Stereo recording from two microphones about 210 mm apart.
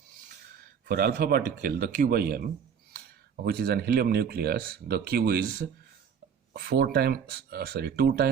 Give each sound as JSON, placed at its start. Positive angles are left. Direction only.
{"t": 0.9, "sound": "speech", "side_deg": -45}